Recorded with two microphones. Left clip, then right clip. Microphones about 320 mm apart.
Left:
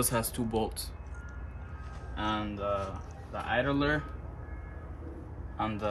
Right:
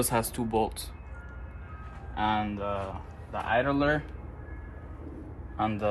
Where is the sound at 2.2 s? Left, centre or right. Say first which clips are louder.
Right 5 dB; centre.